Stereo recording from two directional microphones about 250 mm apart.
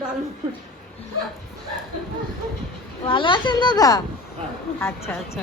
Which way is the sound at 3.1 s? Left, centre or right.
Centre.